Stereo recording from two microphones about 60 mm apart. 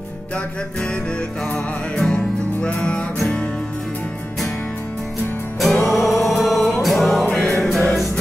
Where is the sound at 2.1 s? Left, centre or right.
Centre.